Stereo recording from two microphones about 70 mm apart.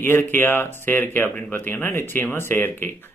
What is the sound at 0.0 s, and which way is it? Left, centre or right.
Speech, left.